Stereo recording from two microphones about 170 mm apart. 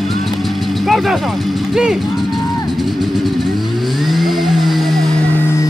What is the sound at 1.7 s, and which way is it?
Speech, 5° right (ahead or behind).